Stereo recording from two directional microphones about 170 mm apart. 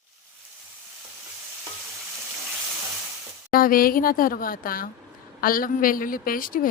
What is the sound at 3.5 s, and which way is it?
A woman's voice, 55° left (ahead or behind).